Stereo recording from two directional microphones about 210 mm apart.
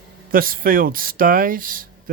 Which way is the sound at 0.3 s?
45° right (ahead or behind).